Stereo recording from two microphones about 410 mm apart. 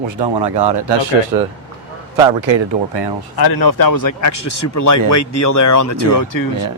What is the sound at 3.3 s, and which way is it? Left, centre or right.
Speech, left.